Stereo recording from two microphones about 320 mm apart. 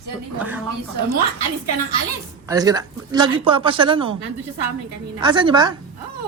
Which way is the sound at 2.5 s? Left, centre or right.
Centre.